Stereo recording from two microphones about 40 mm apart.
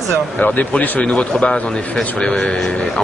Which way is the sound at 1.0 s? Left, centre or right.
Left.